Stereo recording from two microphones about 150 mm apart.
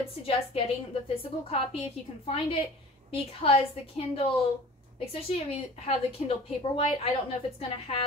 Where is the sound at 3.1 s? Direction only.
40° left (ahead or behind).